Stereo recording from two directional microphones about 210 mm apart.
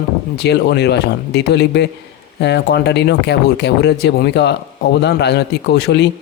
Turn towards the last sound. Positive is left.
turn(degrees=55)  # may be behind; listen again after turning